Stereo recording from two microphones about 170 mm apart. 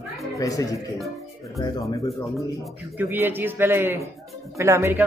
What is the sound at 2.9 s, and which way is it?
A man's voice, 10° right (ahead or behind).